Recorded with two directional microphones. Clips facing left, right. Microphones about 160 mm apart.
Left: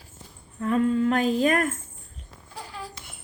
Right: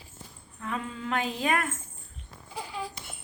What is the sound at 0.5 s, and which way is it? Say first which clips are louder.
Female singing: left 13 dB; 45° left (ahead or behind).